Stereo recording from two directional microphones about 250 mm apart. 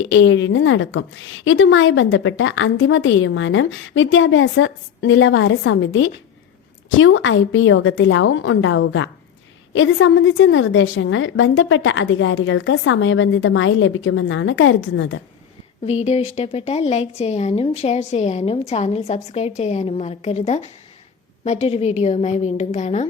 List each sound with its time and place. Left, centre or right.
0.0 s a woman's voice: left
16.0 s speech: left